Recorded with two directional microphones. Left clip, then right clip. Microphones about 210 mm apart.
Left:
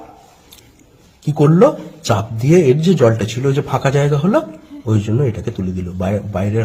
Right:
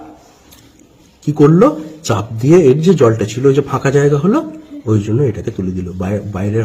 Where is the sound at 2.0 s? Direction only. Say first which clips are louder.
Right 3 dB; 15° left (ahead or behind).